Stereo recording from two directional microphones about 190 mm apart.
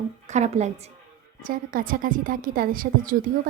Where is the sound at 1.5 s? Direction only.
45° right (ahead or behind).